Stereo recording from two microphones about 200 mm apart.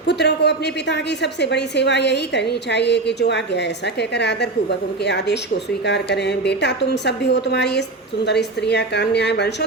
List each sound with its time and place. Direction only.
0.1 s a woman's voice: 60° left (ahead or behind)